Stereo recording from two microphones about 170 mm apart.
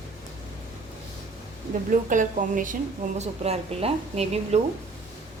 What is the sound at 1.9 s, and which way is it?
Speech, 50° right (ahead or behind).